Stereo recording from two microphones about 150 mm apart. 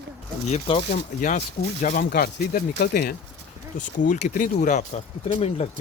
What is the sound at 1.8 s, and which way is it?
Speech, 80° left.